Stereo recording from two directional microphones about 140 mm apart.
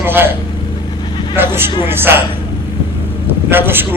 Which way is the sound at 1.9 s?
15° right (ahead or behind).